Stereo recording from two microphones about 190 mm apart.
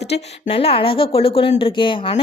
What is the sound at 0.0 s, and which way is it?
A woman's voice, 30° left (ahead or behind).